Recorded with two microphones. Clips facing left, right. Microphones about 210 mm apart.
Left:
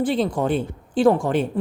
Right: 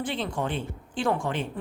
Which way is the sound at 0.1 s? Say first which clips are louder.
Left 9 dB; 40° left (ahead or behind).